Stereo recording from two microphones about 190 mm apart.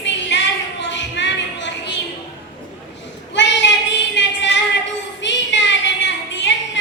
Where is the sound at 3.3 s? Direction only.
70° left (ahead or behind).